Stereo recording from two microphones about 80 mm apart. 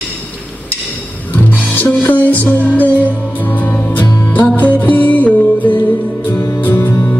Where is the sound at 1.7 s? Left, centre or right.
Left.